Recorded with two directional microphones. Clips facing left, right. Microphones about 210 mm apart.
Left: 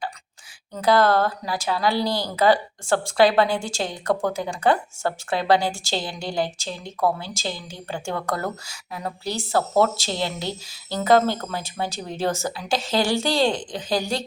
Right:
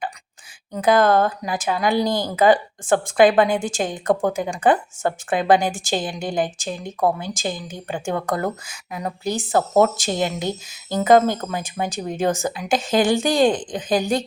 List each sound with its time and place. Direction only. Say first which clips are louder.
0.7 s speech: right 2 dB; 20° right (ahead or behind)